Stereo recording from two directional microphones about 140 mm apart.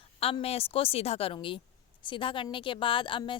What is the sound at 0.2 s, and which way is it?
A woman's voice, 45° left (ahead or behind).